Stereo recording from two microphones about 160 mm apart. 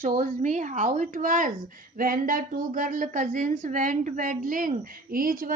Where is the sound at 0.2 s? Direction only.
50° right (ahead or behind).